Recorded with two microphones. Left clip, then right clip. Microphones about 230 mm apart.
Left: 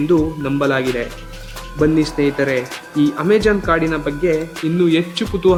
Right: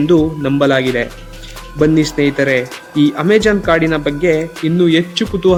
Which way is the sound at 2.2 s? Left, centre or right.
Right.